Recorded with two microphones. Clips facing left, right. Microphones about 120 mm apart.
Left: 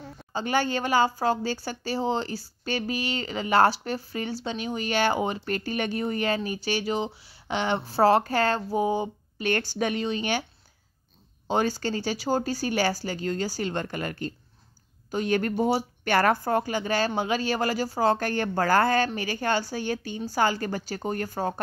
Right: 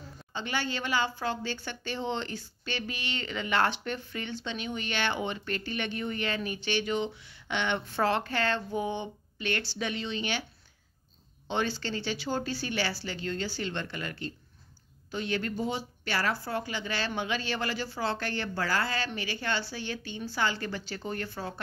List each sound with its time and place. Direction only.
0.3 s a woman's voice: 40° left (ahead or behind)
11.4 s a woman's voice: 40° left (ahead or behind)